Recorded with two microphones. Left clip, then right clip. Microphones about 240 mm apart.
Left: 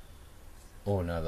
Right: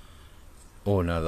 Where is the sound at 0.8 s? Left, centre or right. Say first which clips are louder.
Right 6 dB; right.